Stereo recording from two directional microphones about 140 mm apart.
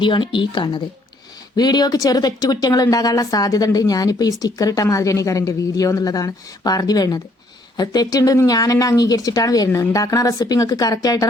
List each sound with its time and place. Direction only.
0.0 s speech: 35° left (ahead or behind)